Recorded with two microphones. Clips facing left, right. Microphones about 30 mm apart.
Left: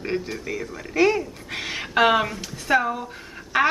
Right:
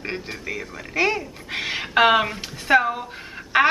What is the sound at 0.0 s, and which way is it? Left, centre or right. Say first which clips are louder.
A woman's voice: left 2 dB; centre.